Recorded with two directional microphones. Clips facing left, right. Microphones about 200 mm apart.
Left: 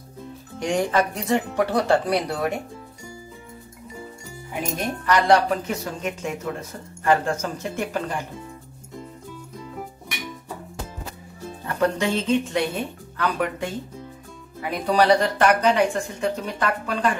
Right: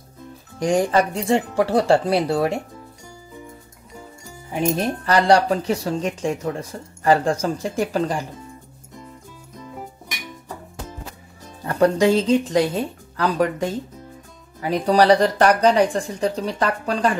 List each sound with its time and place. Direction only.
0.6 s speech: 30° right (ahead or behind)
5.0 s speech: 30° right (ahead or behind)
11.6 s speech: 35° right (ahead or behind)